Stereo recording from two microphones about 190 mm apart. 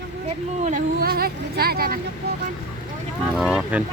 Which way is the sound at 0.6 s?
45° right (ahead or behind).